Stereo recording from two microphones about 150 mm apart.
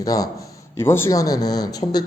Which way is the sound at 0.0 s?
25° left (ahead or behind).